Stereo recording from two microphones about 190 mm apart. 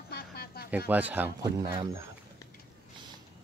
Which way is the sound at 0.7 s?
10° right (ahead or behind).